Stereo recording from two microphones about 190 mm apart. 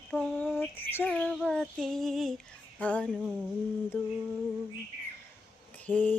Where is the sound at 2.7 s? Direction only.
5° left (ahead or behind).